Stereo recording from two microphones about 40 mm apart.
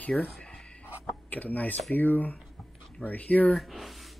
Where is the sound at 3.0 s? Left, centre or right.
Left.